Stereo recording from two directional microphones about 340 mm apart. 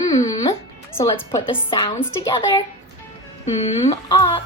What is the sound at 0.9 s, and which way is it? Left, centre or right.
Speech, centre.